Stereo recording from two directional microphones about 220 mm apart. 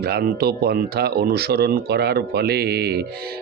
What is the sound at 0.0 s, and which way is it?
Speech, 45° right (ahead or behind).